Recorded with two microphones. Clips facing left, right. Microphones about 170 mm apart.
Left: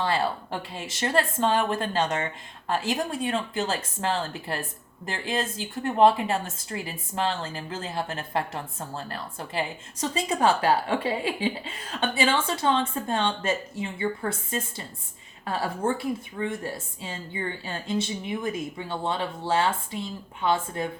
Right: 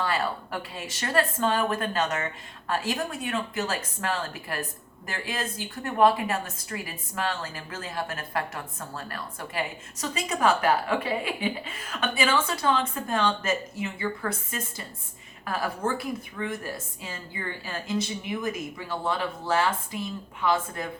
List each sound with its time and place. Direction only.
0.0 s speech: 30° left (ahead or behind)